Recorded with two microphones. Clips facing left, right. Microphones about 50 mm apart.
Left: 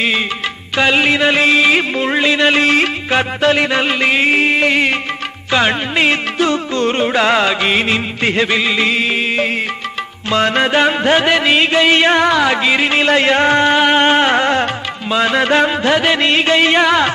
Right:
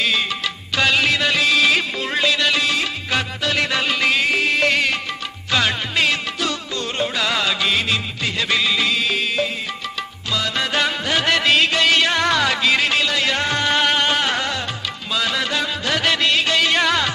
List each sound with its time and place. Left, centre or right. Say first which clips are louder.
0.8 s music: left 5 dB; left
3.1 s music: left 8 dB; left
10.7 s music: left 8 dB; left
12.2 s music: left 5 dB; centre
13.0 s music: left 8 dB; left
13.7 s music: left 6 dB; left
14.0 s music: left 8 dB; left
16.0 s music: left 5 dB; left